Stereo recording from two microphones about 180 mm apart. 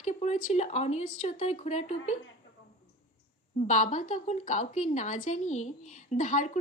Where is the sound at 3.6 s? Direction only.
40° left (ahead or behind).